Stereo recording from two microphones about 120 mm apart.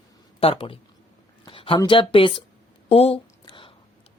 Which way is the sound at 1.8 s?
45° left (ahead or behind).